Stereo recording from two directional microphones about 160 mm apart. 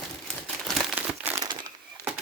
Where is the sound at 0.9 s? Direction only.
10° right (ahead or behind).